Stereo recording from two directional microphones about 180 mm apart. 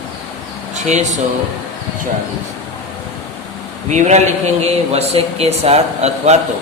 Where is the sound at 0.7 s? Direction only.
40° right (ahead or behind).